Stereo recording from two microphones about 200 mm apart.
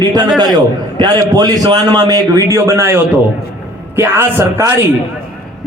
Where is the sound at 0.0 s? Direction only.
20° right (ahead or behind).